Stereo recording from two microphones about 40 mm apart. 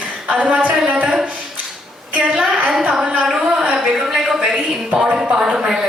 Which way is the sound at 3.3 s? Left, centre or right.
Right.